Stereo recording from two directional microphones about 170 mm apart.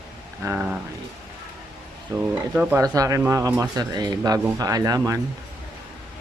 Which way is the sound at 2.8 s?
20° right (ahead or behind).